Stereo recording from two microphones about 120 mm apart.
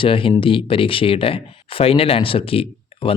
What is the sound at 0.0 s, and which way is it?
Speech, 45° left (ahead or behind).